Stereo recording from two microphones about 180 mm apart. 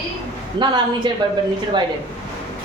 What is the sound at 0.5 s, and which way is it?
Speech, 25° right (ahead or behind).